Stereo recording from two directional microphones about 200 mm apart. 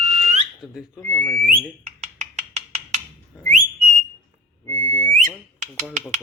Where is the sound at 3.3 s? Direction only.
5° right (ahead or behind).